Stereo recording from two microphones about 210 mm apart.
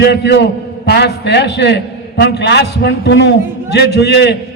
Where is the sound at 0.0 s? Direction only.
55° left (ahead or behind).